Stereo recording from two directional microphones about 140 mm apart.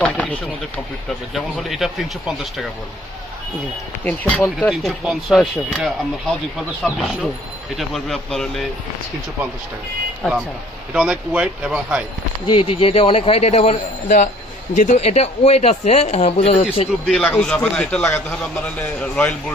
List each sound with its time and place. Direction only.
0.0 s speech: 10° left (ahead or behind)
1.3 s speech: centre (ahead or behind)
4.0 s speech: 10° left (ahead or behind)
4.7 s speech: centre (ahead or behind)
10.2 s speech: 5° left (ahead or behind)
10.9 s speech: 5° right (ahead or behind)
12.5 s speech: 40° left (ahead or behind)
14.8 s speech: 55° left (ahead or behind)
17.1 s speech: 5° left (ahead or behind)